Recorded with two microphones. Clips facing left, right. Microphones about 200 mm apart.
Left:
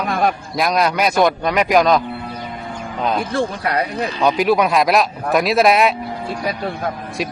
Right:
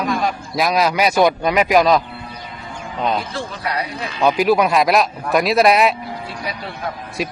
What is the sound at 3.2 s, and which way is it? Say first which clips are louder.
Speech: left 6 dB; 55° left (ahead or behind).